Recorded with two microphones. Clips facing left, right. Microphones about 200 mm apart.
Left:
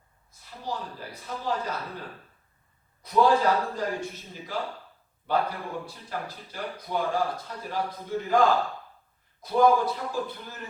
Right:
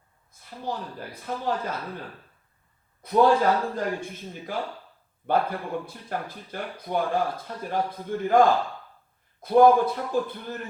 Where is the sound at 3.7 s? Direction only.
55° right (ahead or behind).